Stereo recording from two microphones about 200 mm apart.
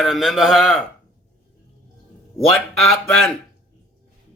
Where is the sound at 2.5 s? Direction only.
5° left (ahead or behind).